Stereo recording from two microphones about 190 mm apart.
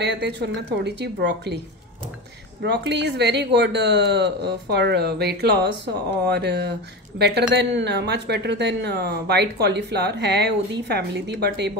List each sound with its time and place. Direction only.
0.0 s speech: 60° right (ahead or behind)
2.6 s speech: 60° right (ahead or behind)